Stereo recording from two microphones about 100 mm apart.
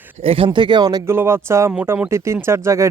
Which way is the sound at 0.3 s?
60° right (ahead or behind).